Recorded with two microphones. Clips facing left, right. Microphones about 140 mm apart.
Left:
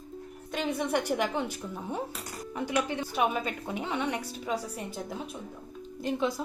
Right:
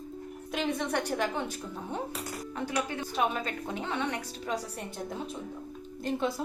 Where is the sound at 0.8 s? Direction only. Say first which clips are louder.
Left 2 dB; 10° left (ahead or behind).